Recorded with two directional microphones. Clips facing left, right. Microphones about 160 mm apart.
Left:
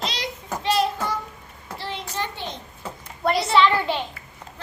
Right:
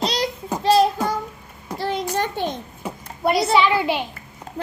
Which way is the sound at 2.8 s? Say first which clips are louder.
Right 2 dB; 10° right (ahead or behind).